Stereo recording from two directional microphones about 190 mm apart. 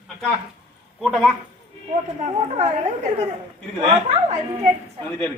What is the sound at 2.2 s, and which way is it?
Speech, 40° right (ahead or behind).